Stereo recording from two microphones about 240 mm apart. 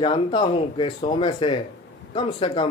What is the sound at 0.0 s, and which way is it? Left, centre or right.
Speech, centre.